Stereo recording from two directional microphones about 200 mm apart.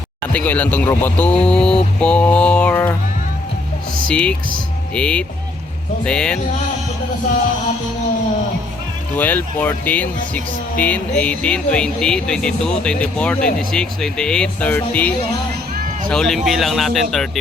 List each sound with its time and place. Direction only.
0.3 s speech: 5° left (ahead or behind)
4.1 s speech: 5° left (ahead or behind)
9.1 s speech: 10° left (ahead or behind)